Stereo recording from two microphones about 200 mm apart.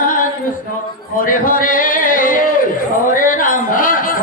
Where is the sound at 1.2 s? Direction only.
45° left (ahead or behind).